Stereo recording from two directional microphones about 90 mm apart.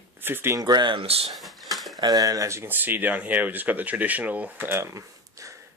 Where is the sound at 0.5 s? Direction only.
50° right (ahead or behind); by 1.3 s 85° right.